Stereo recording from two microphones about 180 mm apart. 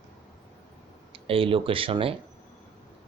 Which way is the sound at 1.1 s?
30° right (ahead or behind).